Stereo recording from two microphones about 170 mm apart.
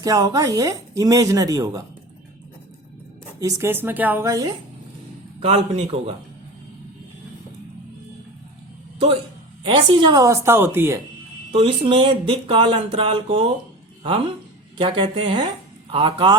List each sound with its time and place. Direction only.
0.0 s speech: 25° right (ahead or behind)
3.4 s a woman's voice: 15° right (ahead or behind)
5.4 s speech: 40° right (ahead or behind)
9.6 s a woman's voice: 30° right (ahead or behind)
11.5 s speech: 30° right (ahead or behind)
14.8 s speech: 30° right (ahead or behind)